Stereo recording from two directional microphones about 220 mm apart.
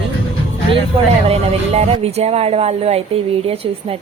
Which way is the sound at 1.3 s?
30° right (ahead or behind).